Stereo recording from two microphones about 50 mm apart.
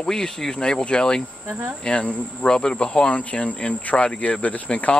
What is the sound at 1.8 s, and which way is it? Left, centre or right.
Cricket, left.